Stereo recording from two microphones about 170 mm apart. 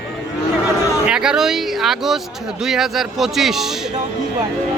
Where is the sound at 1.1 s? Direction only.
5° right (ahead or behind).